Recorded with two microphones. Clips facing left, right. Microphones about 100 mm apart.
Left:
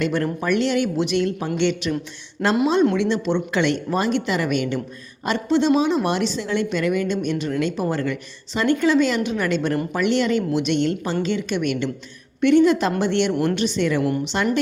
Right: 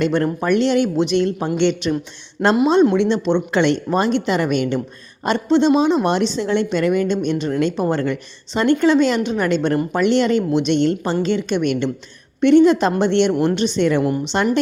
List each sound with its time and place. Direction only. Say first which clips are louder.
0.0 s a woman's voice: right 4 dB; 30° right (ahead or behind)
13.7 s a woman's voice: right 4 dB; 35° right (ahead or behind)